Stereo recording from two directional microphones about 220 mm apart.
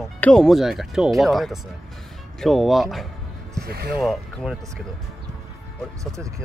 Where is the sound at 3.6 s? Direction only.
45° right (ahead or behind).